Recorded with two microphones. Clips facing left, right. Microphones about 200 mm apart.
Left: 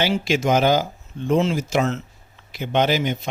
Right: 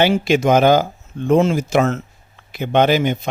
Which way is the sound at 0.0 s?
55° right (ahead or behind).